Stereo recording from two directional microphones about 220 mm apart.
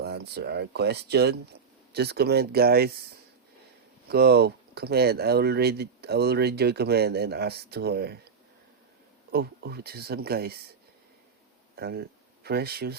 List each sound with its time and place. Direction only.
0.0 s speech: 45° right (ahead or behind)
4.1 s speech: 45° right (ahead or behind)
9.3 s speech: 45° right (ahead or behind)
11.8 s speech: 45° right (ahead or behind)